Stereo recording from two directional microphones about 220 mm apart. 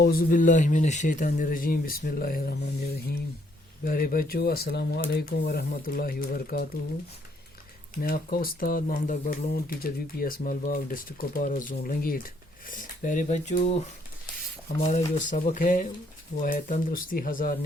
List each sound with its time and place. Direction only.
0.0 s speech: 45° left (ahead or behind)
8.0 s speech: 40° left (ahead or behind)
14.8 s speech: 35° left (ahead or behind)